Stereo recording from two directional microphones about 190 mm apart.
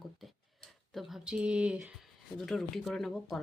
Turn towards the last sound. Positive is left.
turn(degrees=0)  # may be behind; listen again after turning